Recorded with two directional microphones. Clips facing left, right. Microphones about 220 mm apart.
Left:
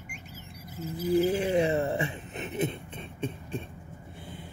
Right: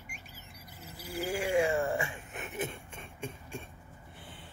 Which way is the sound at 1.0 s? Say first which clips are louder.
Left 10 dB; 20° left (ahead or behind).